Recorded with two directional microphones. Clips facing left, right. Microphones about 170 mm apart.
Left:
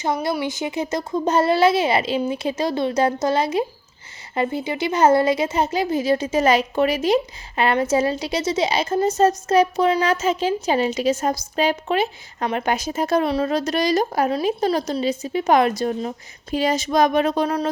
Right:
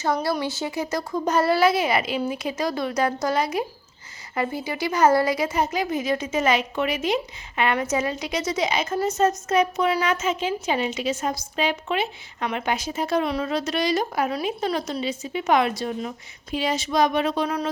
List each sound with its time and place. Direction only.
0.0 s speech: 20° left (ahead or behind); by 17.7 s 40° left (ahead or behind)